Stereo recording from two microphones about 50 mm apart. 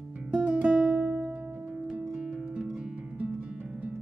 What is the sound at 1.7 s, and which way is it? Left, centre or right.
Music, centre.